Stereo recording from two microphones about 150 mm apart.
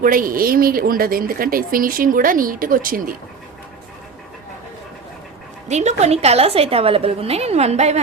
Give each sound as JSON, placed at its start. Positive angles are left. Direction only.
{"t": 0.0, "sound": "a woman's voice", "side_deg": -65}
{"t": 5.6, "sound": "a woman's voice", "side_deg": -50}